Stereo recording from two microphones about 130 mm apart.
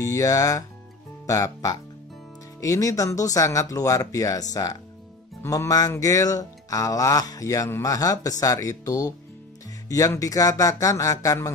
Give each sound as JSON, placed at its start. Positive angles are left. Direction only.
{"t": 0.0, "sound": "music", "side_deg": 25}
{"t": 1.2, "sound": "speech", "side_deg": 25}
{"t": 2.6, "sound": "music", "side_deg": 25}